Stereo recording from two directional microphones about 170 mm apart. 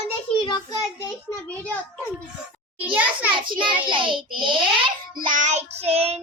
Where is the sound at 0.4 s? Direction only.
25° left (ahead or behind).